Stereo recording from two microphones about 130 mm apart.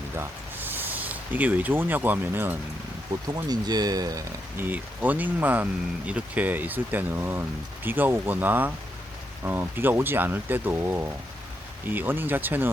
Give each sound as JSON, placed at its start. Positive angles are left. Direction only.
{"t": 0.2, "sound": "speech", "side_deg": -15}
{"t": 3.2, "sound": "speech", "side_deg": -30}
{"t": 4.5, "sound": "speech", "side_deg": -15}